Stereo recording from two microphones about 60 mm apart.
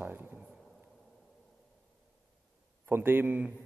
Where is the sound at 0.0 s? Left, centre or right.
Right.